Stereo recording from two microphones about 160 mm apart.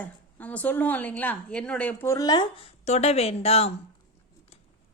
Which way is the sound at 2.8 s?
40° left (ahead or behind).